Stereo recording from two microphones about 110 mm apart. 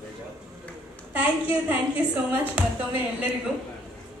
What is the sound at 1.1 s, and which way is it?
A woman's voice, 15° right (ahead or behind).